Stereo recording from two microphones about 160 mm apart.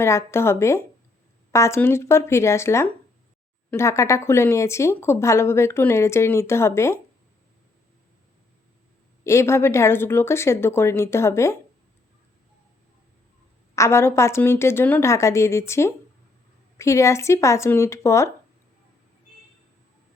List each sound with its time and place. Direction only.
0.0 s speech: 15° left (ahead or behind)
9.2 s speech: 15° left (ahead or behind)
13.7 s speech: 15° left (ahead or behind)